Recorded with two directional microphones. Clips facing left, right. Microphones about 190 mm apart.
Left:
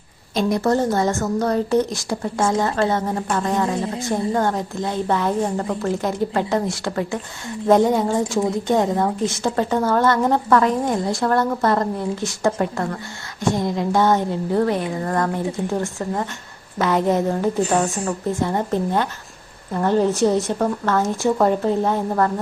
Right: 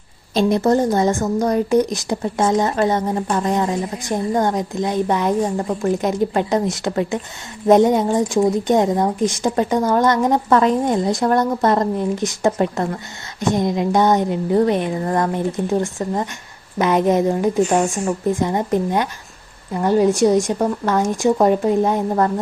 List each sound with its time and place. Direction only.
0.3 s a woman's voice: 20° right (ahead or behind)